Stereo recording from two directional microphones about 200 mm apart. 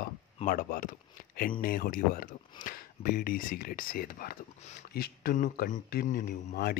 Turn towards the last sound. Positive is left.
turn(degrees=45)  # may be behind; listen again after turning